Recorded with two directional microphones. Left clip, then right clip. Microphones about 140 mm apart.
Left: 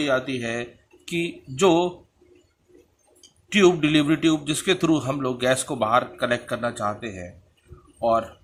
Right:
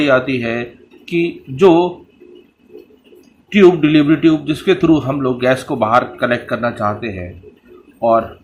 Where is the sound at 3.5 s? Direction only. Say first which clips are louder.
Right 8 dB; 40° left (ahead or behind).